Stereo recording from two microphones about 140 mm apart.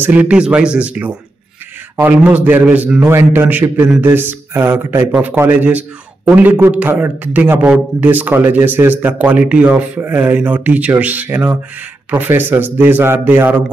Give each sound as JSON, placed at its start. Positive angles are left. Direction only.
{"t": 0.0, "sound": "speech", "side_deg": -10}